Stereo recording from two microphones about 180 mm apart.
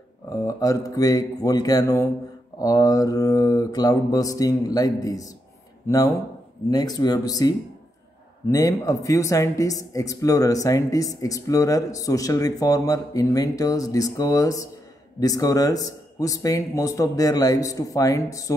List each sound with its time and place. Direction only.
0.3 s speech: 20° left (ahead or behind)